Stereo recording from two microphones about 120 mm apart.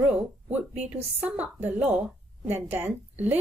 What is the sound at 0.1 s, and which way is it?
A woman's voice, 10° right (ahead or behind).